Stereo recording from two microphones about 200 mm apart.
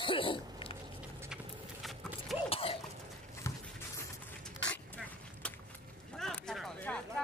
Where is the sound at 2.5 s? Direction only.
30° left (ahead or behind).